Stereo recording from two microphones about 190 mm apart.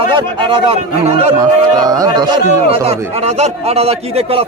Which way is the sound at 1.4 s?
20° right (ahead or behind).